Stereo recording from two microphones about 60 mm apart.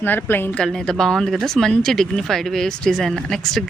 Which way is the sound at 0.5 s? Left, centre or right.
Centre.